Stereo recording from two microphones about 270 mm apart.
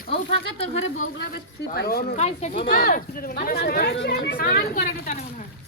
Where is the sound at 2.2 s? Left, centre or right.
Left.